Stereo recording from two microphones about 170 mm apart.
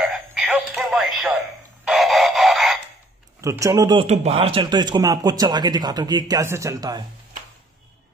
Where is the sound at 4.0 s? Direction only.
35° right (ahead or behind).